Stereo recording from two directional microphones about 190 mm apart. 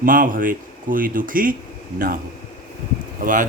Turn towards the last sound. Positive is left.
turn(degrees=-45)  # may be behind; listen again after turning